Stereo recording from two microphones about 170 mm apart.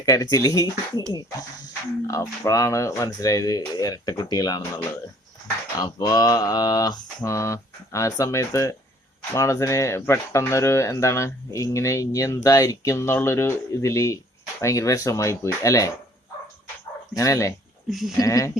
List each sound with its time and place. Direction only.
0.0 s speech: 20° left (ahead or behind)
2.0 s speech: 20° left (ahead or behind)
17.2 s speech: 20° left (ahead or behind)
17.8 s speech: centre (ahead or behind)
18.2 s speech: 20° left (ahead or behind)